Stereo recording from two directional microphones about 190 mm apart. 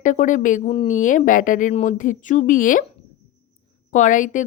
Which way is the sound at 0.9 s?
45° left (ahead or behind).